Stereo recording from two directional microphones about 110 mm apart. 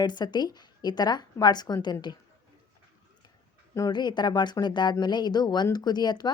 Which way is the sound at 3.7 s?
35° left (ahead or behind).